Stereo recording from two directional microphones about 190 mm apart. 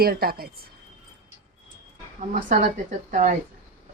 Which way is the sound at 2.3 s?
40° right (ahead or behind).